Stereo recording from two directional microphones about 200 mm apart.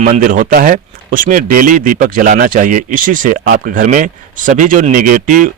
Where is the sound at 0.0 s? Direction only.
45° right (ahead or behind).